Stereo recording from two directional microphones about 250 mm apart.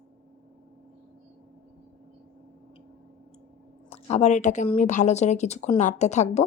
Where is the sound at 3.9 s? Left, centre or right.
Left.